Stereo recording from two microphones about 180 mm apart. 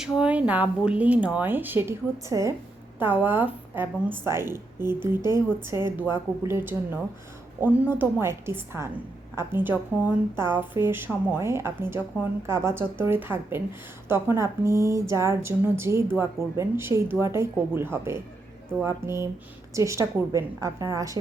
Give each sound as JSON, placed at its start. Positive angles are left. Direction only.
{"t": 0.0, "sound": "a woman's voice", "side_deg": -5}